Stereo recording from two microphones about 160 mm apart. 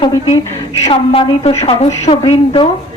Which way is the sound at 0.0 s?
30° left (ahead or behind).